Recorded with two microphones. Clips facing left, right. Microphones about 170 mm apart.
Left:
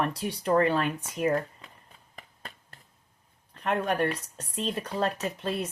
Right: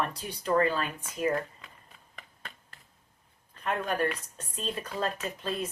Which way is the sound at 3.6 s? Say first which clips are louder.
Left 3 dB; 65° left (ahead or behind).